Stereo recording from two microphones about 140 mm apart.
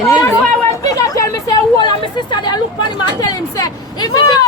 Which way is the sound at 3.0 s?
30° left (ahead or behind).